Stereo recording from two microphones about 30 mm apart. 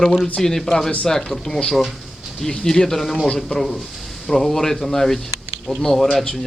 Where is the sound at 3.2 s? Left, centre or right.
Left.